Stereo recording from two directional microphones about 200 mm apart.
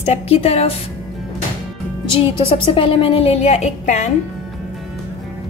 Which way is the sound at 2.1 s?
25° left (ahead or behind).